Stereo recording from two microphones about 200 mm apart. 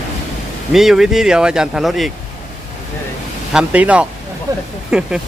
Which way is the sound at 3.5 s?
5° right (ahead or behind).